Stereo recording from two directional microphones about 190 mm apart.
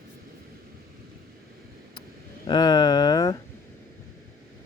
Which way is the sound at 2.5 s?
20° left (ahead or behind).